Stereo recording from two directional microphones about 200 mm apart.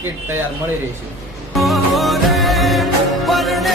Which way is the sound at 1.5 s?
Centre (ahead or behind).